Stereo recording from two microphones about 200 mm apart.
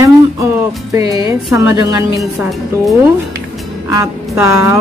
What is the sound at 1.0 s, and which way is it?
A woman's voice, 15° right (ahead or behind).